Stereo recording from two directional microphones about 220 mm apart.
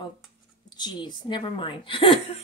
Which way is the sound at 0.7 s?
20° left (ahead or behind).